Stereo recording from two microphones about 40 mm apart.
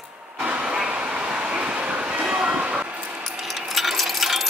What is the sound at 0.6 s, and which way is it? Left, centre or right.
Vehicle, right.